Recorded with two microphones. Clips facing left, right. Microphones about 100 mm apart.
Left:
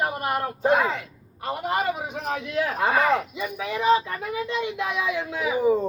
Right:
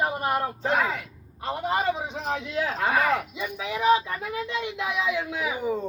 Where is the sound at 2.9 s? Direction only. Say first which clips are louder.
Left 2 dB; centre (ahead or behind).